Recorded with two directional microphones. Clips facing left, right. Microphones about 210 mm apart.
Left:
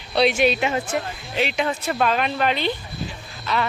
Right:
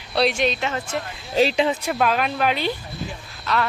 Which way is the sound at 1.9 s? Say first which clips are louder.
Even; 5° right (ahead or behind).